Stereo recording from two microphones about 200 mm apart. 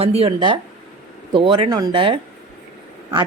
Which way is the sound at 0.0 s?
30° right (ahead or behind).